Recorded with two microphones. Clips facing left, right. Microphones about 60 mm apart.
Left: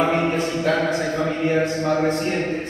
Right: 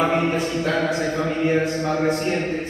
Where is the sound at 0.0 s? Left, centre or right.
Centre.